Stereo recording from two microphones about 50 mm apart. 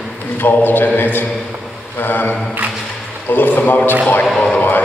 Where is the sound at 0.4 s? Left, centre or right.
Left.